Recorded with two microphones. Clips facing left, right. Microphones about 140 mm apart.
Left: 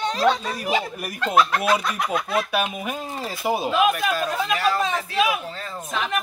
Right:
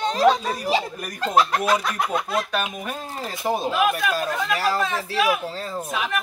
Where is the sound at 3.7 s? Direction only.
20° left (ahead or behind).